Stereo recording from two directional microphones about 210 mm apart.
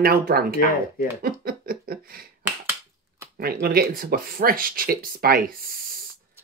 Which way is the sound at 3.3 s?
45° right (ahead or behind).